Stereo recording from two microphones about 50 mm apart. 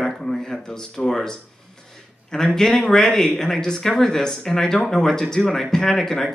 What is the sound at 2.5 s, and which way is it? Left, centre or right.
Speech, centre.